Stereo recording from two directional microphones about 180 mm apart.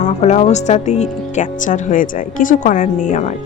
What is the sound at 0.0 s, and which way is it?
Speech, 40° left (ahead or behind).